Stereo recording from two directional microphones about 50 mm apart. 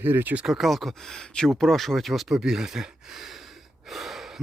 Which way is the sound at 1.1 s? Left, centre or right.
Centre.